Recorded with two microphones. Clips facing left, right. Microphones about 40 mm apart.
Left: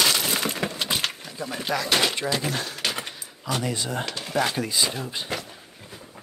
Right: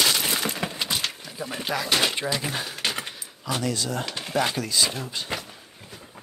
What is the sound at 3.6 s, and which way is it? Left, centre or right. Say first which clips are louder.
Speech: right 3 dB; left.